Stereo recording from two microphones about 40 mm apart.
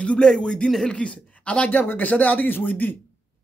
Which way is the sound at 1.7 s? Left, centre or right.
Left.